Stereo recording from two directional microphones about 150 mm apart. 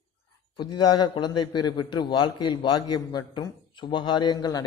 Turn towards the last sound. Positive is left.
turn(degrees=25)  # may be behind; listen again after turning